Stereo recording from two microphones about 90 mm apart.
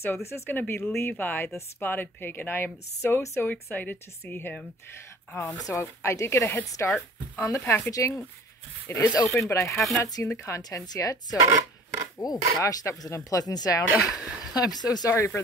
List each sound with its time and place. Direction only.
0.0 s speech: 25° left (ahead or behind)
5.6 s speech: 35° left (ahead or behind)
13.9 s speech: centre (ahead or behind)
14.5 s speech: 45° left (ahead or behind)
15.0 s speech: 30° left (ahead or behind)